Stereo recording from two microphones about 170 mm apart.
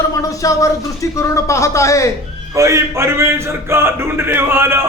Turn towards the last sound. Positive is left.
turn(degrees=-15)  # may be behind; listen again after turning